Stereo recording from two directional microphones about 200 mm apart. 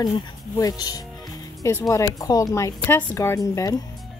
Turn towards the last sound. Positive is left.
turn(degrees=15)  # may be behind; listen again after turning